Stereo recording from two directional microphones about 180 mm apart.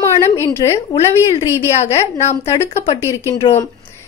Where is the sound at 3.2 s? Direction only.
15° left (ahead or behind).